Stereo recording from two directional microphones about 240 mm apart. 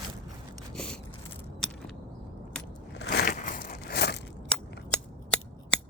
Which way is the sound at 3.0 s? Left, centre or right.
Left.